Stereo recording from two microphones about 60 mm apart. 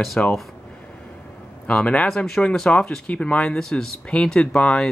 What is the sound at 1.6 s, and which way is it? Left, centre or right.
Speech, centre.